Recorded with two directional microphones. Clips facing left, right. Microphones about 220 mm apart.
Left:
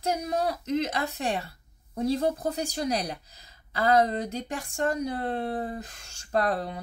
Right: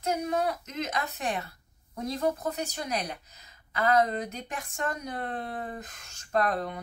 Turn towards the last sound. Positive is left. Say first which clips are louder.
# left 1 dB
turn(degrees=30)  # may be behind; listen again after turning